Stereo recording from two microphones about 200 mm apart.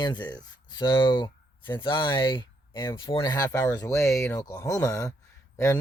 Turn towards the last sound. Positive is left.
turn(degrees=15)  # may be behind; listen again after turning